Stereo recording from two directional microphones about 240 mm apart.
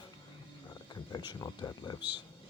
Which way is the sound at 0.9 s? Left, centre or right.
Centre.